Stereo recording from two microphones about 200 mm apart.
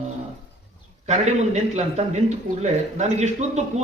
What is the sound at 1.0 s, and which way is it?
A man's voice, 35° right (ahead or behind).